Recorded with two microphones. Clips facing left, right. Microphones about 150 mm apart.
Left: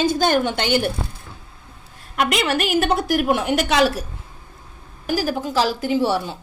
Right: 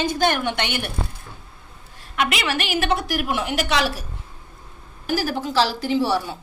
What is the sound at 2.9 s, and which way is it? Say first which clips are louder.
Speech: left 4 dB; 45° left (ahead or behind).